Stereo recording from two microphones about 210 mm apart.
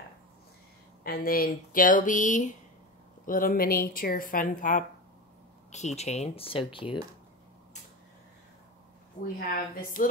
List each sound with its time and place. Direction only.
1.0 s speech: 45° left (ahead or behind); by 7.0 s 25° left (ahead or behind)
9.4 s speech: 45° left (ahead or behind)